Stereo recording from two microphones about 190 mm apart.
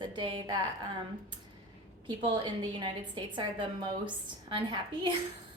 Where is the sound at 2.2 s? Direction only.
25° right (ahead or behind).